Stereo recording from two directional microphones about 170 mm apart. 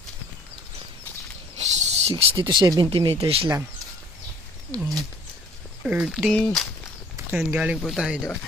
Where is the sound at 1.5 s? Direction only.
40° right (ahead or behind).